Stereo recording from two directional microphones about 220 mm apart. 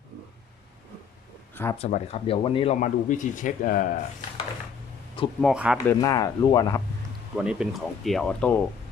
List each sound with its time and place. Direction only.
1.8 s speech: 30° left (ahead or behind)
5.4 s speech: 5° right (ahead or behind)
5.7 s speech: 15° left (ahead or behind)
7.3 s speech: 5° right (ahead or behind)